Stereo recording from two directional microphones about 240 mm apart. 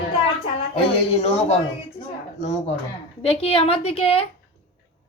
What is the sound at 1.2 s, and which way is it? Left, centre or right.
A woman's voice, left.